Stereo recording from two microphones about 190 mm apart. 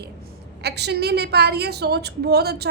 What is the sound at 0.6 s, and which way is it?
A woman's voice, 60° right (ahead or behind).